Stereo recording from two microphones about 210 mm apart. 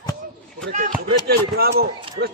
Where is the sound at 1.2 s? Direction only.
50° right (ahead or behind).